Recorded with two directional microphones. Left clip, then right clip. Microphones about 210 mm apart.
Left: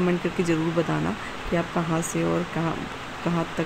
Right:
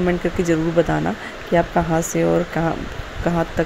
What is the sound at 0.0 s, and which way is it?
Speech, 15° right (ahead or behind).